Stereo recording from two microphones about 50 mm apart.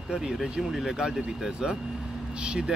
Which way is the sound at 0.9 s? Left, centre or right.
Centre.